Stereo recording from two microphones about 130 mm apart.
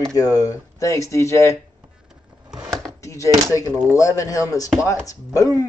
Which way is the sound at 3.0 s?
25° left (ahead or behind).